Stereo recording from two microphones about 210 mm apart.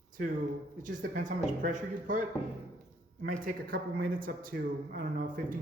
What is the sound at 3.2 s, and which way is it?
Speech, 40° right (ahead or behind).